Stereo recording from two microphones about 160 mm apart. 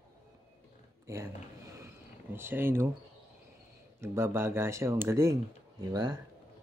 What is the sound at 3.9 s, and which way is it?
Speech, 15° right (ahead or behind).